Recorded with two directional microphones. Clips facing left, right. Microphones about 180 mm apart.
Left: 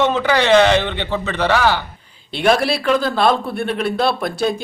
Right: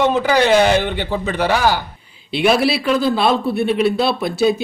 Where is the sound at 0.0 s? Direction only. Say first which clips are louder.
Right 1 dB; 10° right (ahead or behind).